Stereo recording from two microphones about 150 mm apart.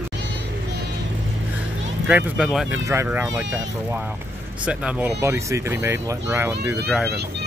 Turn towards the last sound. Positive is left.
turn(degrees=-15)  # may be behind; listen again after turning